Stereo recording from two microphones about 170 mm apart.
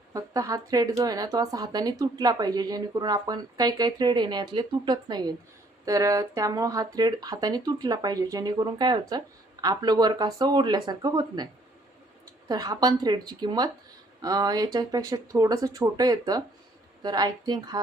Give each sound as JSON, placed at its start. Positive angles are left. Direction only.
{"t": 0.1, "sound": "speech", "side_deg": -20}
{"t": 12.5, "sound": "speech", "side_deg": -20}